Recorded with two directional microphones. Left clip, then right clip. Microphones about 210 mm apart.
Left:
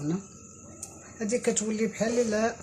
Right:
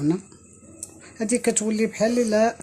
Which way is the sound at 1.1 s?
40° right (ahead or behind).